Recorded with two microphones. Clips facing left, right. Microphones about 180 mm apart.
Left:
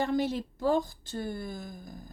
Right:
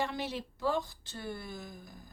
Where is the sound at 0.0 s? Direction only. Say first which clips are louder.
Left 7 dB; 45° left (ahead or behind).